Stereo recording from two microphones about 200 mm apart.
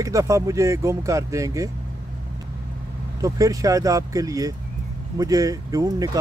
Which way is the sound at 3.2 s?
15° right (ahead or behind).